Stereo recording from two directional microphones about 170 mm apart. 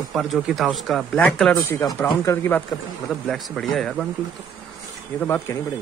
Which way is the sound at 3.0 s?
Centre (ahead or behind).